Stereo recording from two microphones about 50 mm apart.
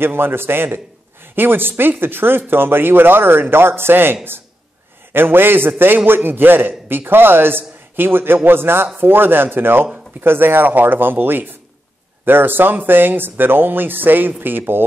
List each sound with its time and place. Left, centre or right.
0.0 s a man's voice: right